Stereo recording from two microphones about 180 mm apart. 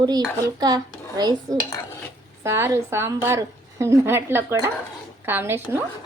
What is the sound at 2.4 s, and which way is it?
Speech, 15° right (ahead or behind).